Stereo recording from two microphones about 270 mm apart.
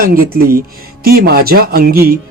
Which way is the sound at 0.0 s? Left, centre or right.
Right.